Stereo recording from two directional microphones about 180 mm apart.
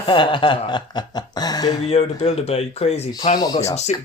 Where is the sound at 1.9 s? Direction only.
35° left (ahead or behind).